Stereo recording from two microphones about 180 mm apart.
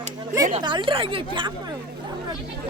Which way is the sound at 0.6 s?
25° right (ahead or behind).